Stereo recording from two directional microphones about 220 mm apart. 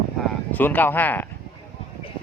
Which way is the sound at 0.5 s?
10° left (ahead or behind).